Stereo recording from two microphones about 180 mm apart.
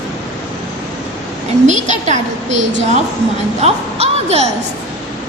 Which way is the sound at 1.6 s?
40° right (ahead or behind).